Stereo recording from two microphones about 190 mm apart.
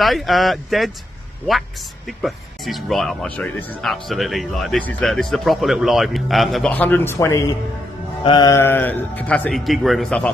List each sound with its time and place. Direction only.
0.0 s speech: centre (ahead or behind)
2.0 s a man's voice: centre (ahead or behind)